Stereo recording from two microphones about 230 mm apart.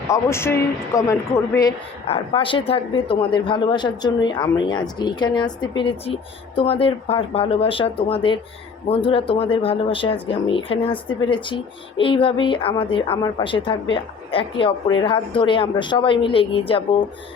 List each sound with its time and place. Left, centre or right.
0.1 s speech: centre